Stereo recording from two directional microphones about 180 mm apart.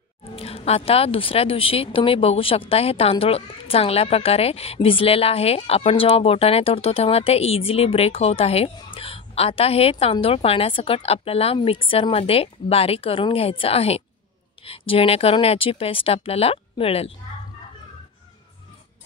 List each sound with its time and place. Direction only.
0.2 s speech: 30° left (ahead or behind)